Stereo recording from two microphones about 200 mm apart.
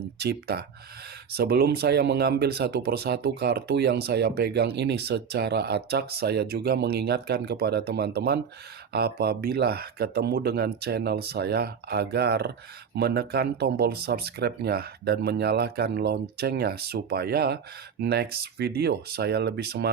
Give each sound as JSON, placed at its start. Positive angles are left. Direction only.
{"t": 0.2, "sound": "speech", "side_deg": -55}